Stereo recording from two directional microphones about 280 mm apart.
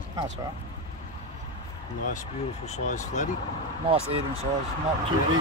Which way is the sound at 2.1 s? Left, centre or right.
Left.